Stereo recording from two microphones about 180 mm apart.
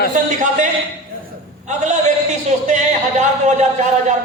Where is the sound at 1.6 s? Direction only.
40° right (ahead or behind).